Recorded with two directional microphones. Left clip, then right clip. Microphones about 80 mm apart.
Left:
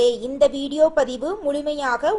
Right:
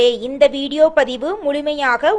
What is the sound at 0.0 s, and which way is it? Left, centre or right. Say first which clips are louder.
A woman's voice: right 4 dB; centre.